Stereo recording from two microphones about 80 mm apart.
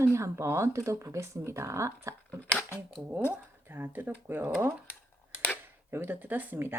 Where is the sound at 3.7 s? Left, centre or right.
Right.